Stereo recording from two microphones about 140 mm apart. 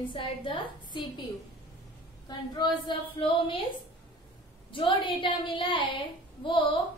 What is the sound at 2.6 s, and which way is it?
A woman's voice, 35° left (ahead or behind).